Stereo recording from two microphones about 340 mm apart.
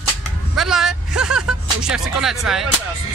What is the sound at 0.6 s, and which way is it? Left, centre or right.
Music, centre.